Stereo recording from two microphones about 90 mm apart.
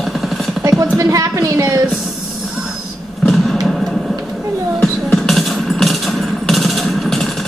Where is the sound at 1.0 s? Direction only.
35° right (ahead or behind).